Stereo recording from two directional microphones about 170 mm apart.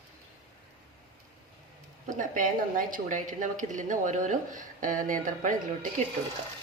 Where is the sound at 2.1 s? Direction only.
50° right (ahead or behind).